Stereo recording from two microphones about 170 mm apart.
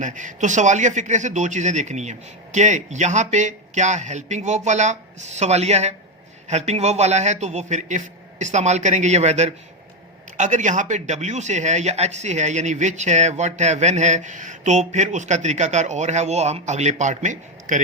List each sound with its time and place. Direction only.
0.0 s a man's voice: 45° right (ahead or behind)